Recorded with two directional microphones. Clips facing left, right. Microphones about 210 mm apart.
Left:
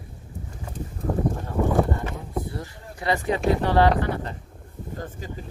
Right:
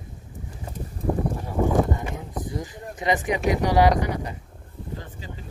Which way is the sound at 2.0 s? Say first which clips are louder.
Left 1 dB; 15° right (ahead or behind).